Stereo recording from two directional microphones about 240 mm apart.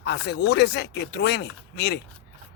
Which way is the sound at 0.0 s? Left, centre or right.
Left.